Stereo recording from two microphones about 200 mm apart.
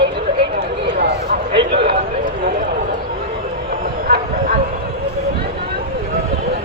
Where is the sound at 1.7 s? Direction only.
55° right (ahead or behind).